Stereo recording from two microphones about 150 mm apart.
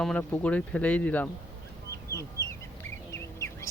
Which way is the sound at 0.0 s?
5° left (ahead or behind).